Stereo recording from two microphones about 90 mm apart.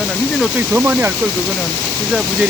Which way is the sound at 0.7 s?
20° right (ahead or behind).